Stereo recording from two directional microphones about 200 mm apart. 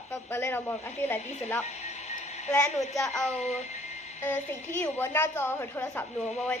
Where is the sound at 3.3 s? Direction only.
35° left (ahead or behind).